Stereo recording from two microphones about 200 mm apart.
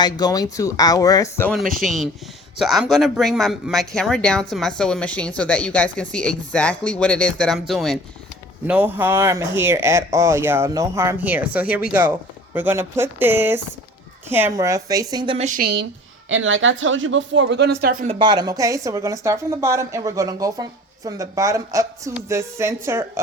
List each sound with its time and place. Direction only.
0.0 s speech: 20° left (ahead or behind)
1.8 s a woman's voice: centre (ahead or behind); by 15.4 s 25° right (ahead or behind)
15.4 s a woman's voice: 45° right (ahead or behind)
16.3 s speech: 75° right (ahead or behind); by 18.1 s 50° right (ahead or behind)
18.1 s a woman's voice: 20° right (ahead or behind)